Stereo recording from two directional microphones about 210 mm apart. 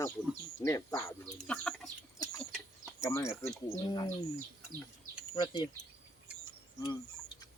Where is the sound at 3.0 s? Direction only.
15° left (ahead or behind).